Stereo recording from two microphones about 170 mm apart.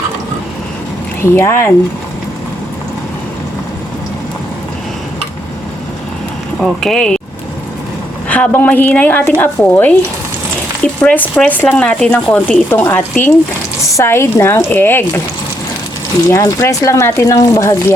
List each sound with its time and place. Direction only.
1.2 s speech: 15° left (ahead or behind)
6.6 s speech: 5° left (ahead or behind)
8.3 s speech: 10° left (ahead or behind)
11.0 s speech: 10° left (ahead or behind)
16.2 s speech: 20° left (ahead or behind)